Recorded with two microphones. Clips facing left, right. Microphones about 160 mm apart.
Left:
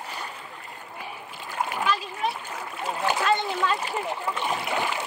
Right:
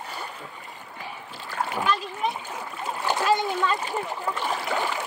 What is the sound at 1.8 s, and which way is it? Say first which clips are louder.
Splash: right 1 dB; 5° left (ahead or behind).